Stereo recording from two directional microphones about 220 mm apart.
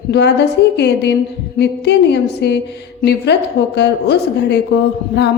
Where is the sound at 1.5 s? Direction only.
50° left (ahead or behind).